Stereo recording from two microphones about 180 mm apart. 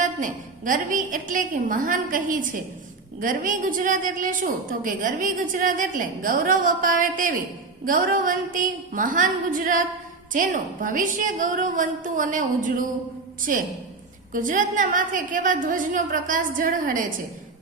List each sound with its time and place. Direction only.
0.0 s a woman's voice: 45° right (ahead or behind)
14.3 s a woman's voice: 45° right (ahead or behind)